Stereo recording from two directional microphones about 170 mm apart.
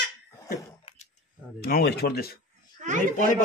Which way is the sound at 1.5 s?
65° left (ahead or behind).